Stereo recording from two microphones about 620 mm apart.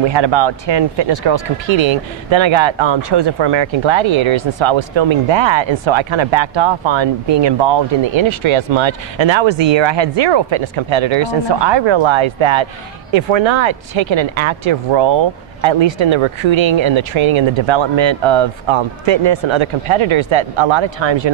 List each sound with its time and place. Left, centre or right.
0.1 s speech: right